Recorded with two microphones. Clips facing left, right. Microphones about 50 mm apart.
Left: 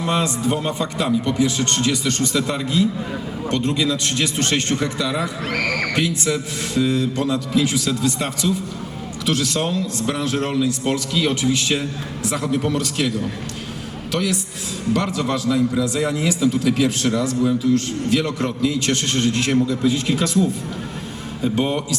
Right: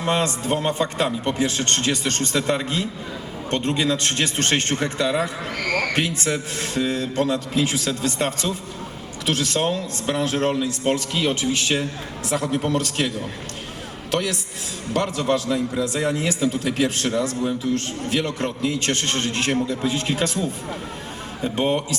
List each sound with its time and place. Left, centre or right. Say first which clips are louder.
0.0 s a man's voice: left 2 dB; right
21.5 s a man's voice: right 1 dB; right